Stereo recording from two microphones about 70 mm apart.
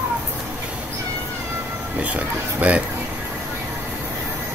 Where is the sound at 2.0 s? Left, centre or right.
Right.